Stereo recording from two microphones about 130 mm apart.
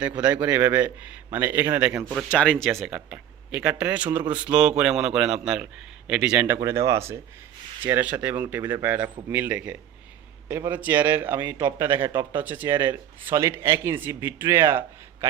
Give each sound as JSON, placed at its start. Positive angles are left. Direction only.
{"t": 0.2, "sound": "speech", "side_deg": -10}
{"t": 2.4, "sound": "speech", "side_deg": 5}
{"t": 6.6, "sound": "speech", "side_deg": -25}